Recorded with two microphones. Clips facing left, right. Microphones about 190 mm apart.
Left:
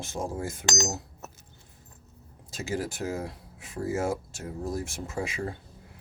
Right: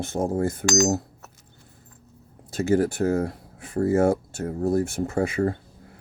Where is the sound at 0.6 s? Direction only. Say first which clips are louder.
Right 8 dB; 50° right (ahead or behind).